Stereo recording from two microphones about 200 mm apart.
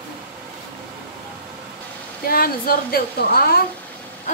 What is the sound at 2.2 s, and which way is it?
Speech, 50° left (ahead or behind).